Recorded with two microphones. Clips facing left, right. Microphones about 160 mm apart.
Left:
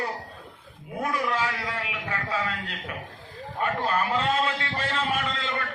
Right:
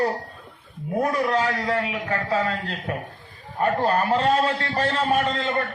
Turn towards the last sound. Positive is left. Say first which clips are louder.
# right 7 dB
turn(degrees=-40)  # may be behind; listen again after turning